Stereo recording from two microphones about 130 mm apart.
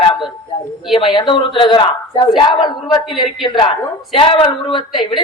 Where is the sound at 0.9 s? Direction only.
40° left (ahead or behind).